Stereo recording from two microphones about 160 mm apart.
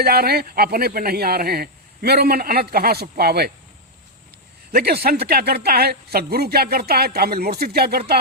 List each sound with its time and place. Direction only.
0.0 s speech: 75° right (ahead or behind)
4.7 s speech: 85° right